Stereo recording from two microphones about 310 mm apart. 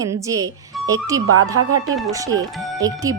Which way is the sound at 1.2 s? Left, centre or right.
Right.